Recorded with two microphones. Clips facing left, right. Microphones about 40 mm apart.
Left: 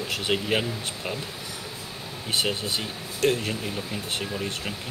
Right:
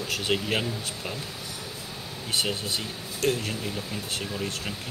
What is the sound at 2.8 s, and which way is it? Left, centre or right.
Speech, left.